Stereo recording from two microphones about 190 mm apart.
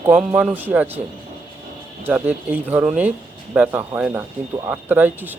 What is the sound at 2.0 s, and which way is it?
Speech, 10° right (ahead or behind).